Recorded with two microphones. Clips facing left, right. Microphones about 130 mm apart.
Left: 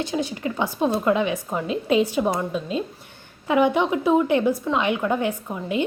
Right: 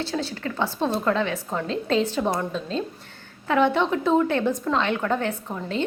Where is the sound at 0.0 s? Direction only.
15° left (ahead or behind).